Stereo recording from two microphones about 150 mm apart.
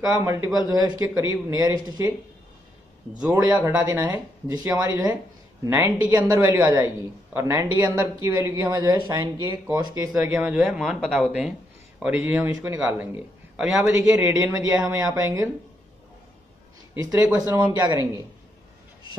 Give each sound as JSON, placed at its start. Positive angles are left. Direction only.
{"t": 0.0, "sound": "speech", "side_deg": -20}
{"t": 3.5, "sound": "speech", "side_deg": -10}
{"t": 4.5, "sound": "speech", "side_deg": -20}
{"t": 10.1, "sound": "speech", "side_deg": -10}
{"t": 12.4, "sound": "speech", "side_deg": -25}
{"t": 12.7, "sound": "speech", "side_deg": -10}
{"t": 14.0, "sound": "speech", "side_deg": -25}
{"t": 17.0, "sound": "speech", "side_deg": -25}